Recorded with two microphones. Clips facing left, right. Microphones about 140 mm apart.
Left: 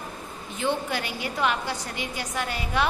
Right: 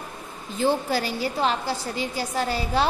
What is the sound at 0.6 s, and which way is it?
A woman's voice, 35° right (ahead or behind).